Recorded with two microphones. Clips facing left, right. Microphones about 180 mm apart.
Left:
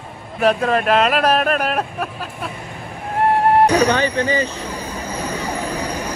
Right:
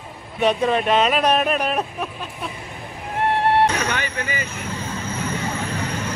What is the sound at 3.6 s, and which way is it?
Speech, 35° left (ahead or behind).